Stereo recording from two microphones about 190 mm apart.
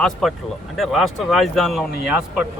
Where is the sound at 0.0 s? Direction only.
Centre (ahead or behind).